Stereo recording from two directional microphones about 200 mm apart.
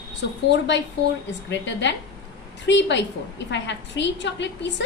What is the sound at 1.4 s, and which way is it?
A woman's voice, 60° left (ahead or behind).